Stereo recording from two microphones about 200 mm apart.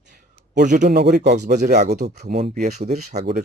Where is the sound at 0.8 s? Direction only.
55° right (ahead or behind).